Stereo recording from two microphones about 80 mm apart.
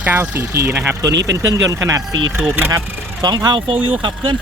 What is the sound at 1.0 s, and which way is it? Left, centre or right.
Speech, right.